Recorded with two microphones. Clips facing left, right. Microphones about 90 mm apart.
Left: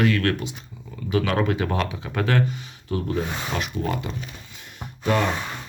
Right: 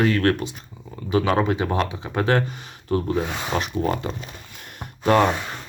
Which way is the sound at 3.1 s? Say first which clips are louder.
Right 3 dB; 30° right (ahead or behind).